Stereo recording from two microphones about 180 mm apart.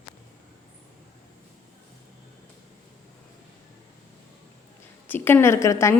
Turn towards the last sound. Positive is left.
turn(degrees=15)  # may be behind; listen again after turning